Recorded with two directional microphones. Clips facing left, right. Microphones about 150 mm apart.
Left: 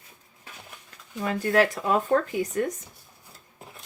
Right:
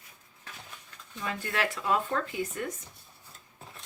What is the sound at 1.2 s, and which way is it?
Speech, 45° left (ahead or behind).